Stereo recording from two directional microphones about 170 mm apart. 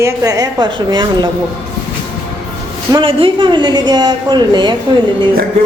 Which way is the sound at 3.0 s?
30° right (ahead or behind).